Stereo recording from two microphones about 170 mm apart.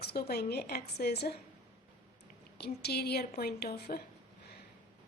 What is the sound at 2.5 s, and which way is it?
A woman's voice, 70° left (ahead or behind).